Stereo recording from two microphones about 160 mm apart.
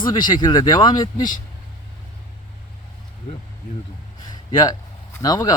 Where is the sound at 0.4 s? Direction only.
25° left (ahead or behind).